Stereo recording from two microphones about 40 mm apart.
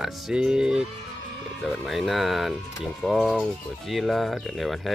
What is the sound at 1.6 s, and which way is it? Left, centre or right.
Speech, centre.